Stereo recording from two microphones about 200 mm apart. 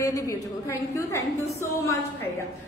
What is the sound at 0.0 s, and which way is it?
A woman's voice, 15° left (ahead or behind).